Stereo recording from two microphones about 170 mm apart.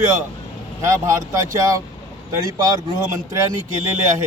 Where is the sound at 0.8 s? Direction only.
20° right (ahead or behind).